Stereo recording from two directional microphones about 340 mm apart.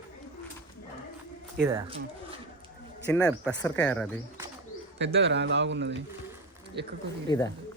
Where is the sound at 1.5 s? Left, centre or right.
Centre.